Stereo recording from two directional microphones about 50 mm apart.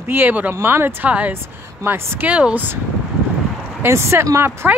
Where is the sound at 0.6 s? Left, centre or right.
Right.